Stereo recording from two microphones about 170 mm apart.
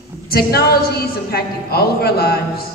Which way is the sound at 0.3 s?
65° left (ahead or behind).